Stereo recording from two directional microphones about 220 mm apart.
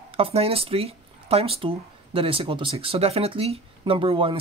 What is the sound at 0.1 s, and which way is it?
Speech, 25° right (ahead or behind).